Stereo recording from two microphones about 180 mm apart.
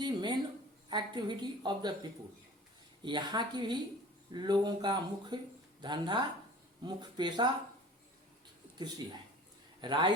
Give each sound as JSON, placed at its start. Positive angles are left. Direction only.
{"t": 0.0, "sound": "a sound", "side_deg": -25}
{"t": 0.9, "sound": "speech", "side_deg": -25}
{"t": 3.0, "sound": "speech", "side_deg": -25}
{"t": 9.8, "sound": "speech", "side_deg": -25}